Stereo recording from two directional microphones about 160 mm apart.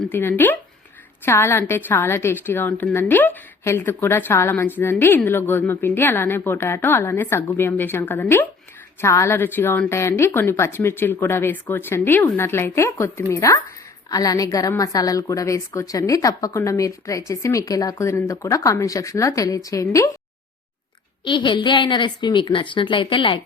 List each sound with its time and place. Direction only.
0.1 s a woman's voice: 15° left (ahead or behind)
21.2 s a woman's voice: 30° left (ahead or behind)